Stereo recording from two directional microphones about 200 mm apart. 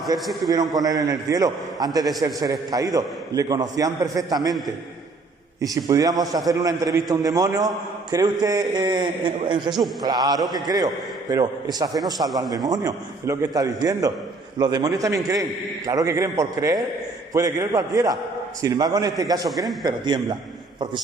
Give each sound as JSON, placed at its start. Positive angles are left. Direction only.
{"t": 0.1, "sound": "a man's voice", "side_deg": -20}
{"t": 5.6, "sound": "a man's voice", "side_deg": -15}
{"t": 12.1, "sound": "a man's voice", "side_deg": 0}
{"t": 12.6, "sound": "a man's voice", "side_deg": -15}